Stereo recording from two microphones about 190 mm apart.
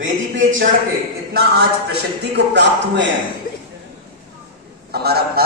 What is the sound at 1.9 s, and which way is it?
Speech, 65° right (ahead or behind).